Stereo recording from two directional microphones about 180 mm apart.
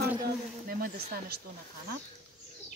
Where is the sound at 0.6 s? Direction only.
50° right (ahead or behind).